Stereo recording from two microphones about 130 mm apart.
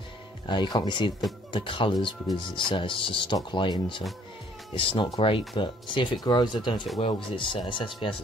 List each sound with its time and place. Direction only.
0.5 s speech: 35° left (ahead or behind)